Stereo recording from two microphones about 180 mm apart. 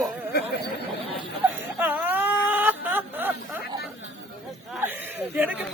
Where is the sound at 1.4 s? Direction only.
10° right (ahead or behind).